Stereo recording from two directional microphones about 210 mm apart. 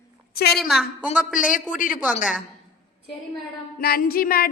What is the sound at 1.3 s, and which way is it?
Speech, 40° left (ahead or behind).